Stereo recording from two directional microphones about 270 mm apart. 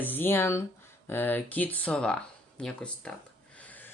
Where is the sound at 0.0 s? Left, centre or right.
Centre.